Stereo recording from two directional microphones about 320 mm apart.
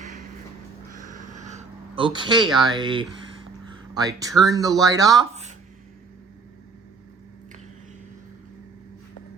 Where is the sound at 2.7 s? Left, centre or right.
Centre.